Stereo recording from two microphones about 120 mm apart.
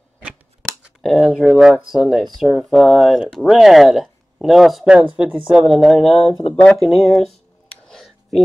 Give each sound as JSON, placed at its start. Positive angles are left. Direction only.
{"t": 0.2, "sound": "scissors", "side_deg": -10}
{"t": 1.0, "sound": "speech", "side_deg": 0}
{"t": 6.0, "sound": "speech", "side_deg": 55}
{"t": 6.5, "sound": "speech", "side_deg": 10}
{"t": 7.9, "sound": "a sound", "side_deg": 5}